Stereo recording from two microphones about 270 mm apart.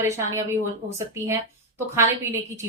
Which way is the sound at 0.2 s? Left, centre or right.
Centre.